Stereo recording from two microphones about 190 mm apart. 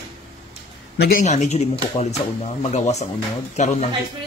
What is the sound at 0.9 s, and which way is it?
Speech, 60° left (ahead or behind).